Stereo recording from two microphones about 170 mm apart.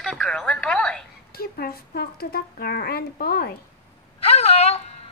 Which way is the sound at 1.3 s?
65° left (ahead or behind).